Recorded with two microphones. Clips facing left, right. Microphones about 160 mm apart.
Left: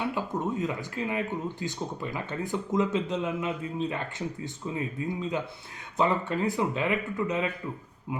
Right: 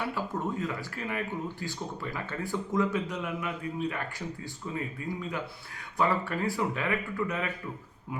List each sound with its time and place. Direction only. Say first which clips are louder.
0.1 s speech: left 2 dB; 20° left (ahead or behind)